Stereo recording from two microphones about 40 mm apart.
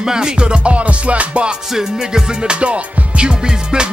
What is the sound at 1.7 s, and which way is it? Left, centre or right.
Music, centre.